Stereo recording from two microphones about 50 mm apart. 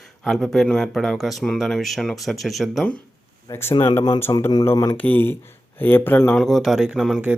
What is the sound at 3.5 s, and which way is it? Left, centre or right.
Speech, left.